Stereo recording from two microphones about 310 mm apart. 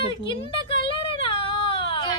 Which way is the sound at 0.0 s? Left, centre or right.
Centre.